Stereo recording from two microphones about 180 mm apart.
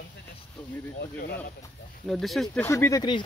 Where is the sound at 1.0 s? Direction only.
60° left (ahead or behind).